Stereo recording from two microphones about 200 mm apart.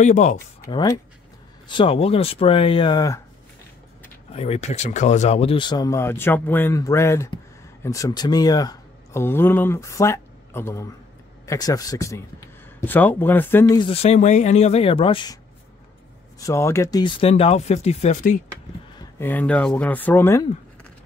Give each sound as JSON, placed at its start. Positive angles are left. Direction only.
{"t": 0.0, "sound": "speech", "side_deg": 35}
{"t": 0.7, "sound": "speech", "side_deg": 20}
{"t": 4.3, "sound": "a man's voice", "side_deg": 30}
{"t": 13.7, "sound": "speech", "side_deg": 30}
{"t": 16.3, "sound": "speech", "side_deg": 15}
{"t": 18.9, "sound": "a man's voice", "side_deg": 10}